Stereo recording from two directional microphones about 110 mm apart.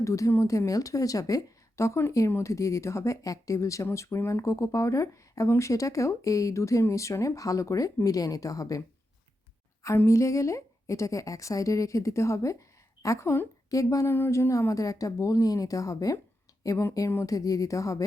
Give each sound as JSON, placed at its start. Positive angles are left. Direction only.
{"t": 0.0, "sound": "speech", "side_deg": 25}
{"t": 10.0, "sound": "speech", "side_deg": 25}